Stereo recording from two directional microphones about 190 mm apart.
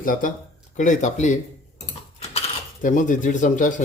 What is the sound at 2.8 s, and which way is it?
Speech, 40° left (ahead or behind).